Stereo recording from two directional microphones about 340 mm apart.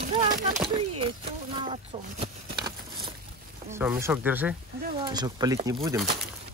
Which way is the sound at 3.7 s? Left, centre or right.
Centre.